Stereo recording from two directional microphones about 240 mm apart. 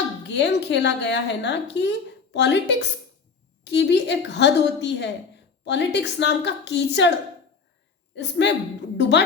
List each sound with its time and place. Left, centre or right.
0.3 s a woman's voice: left
8.1 s a woman's voice: left